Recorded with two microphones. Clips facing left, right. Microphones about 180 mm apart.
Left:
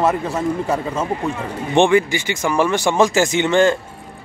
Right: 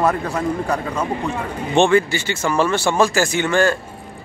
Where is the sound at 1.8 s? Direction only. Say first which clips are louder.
Left 1 dB; 15° left (ahead or behind).